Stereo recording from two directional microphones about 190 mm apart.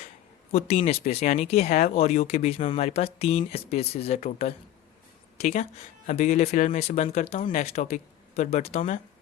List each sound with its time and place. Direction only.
0.5 s speech: 35° left (ahead or behind)